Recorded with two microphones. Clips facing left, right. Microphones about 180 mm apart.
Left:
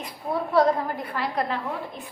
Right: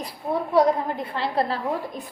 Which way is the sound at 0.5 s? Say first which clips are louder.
Right 1 dB; 20° right (ahead or behind).